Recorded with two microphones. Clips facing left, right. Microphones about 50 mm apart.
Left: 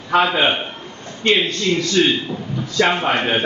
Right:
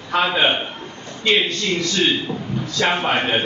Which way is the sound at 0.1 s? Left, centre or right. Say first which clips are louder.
Left 2 dB; centre.